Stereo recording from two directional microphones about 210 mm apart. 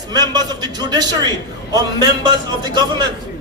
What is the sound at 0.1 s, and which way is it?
Speech, 20° right (ahead or behind).